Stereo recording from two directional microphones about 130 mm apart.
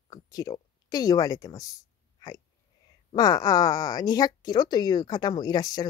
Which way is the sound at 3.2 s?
30° left (ahead or behind).